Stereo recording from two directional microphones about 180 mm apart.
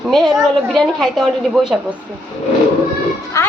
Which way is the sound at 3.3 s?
15° left (ahead or behind).